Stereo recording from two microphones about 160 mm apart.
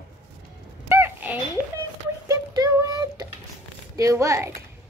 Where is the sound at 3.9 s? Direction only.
20° right (ahead or behind).